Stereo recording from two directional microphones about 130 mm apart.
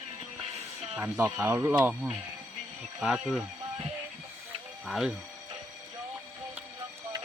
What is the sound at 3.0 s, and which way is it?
Speech, 5° right (ahead or behind).